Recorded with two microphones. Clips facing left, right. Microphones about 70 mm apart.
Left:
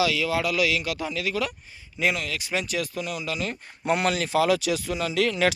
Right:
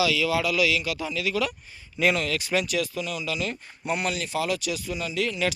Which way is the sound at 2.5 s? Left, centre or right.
Left.